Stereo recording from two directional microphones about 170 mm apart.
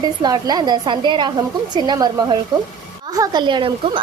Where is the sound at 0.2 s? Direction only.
25° right (ahead or behind).